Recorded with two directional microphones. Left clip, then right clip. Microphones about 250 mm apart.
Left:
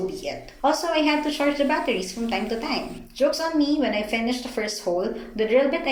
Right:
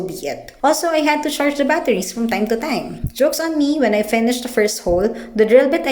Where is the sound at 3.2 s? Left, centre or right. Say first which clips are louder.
Right 5 dB; right.